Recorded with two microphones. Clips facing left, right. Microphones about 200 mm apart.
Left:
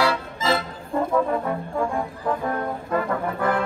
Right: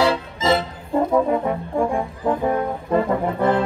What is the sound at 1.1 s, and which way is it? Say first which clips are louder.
Brass instrument: right 2 dB; 20° right (ahead or behind).